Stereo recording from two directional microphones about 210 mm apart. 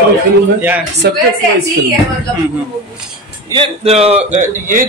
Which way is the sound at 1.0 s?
50° right (ahead or behind).